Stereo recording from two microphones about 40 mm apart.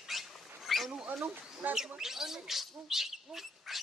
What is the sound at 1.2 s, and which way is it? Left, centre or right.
Speech, right.